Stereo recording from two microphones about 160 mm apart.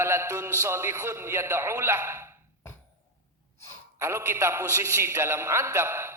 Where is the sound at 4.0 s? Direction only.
15° right (ahead or behind).